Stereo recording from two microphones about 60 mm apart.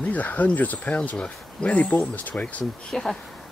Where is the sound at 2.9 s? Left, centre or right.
Centre.